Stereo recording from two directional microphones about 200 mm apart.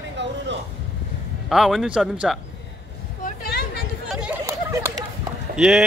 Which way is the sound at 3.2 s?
45° left (ahead or behind).